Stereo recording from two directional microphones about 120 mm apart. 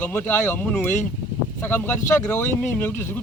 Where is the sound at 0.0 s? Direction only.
15° left (ahead or behind).